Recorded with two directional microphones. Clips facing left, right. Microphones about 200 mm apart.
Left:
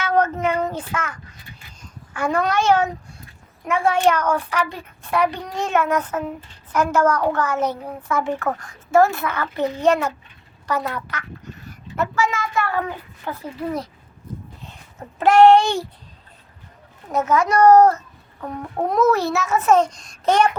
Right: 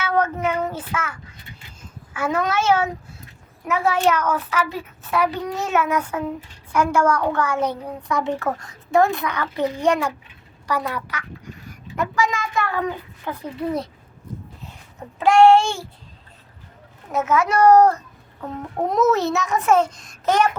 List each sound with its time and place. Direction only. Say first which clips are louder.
0.0 s a child's voice: left 2 dB; 10° right (ahead or behind)
15.2 s a child's voice: left 1 dB; centre (ahead or behind)
17.1 s a child's voice: left 1 dB; 5° right (ahead or behind)
18.3 s a child's voice: even; centre (ahead or behind)
18.9 s a child's voice: even; 20° right (ahead or behind); by 20.5 s centre (ahead or behind)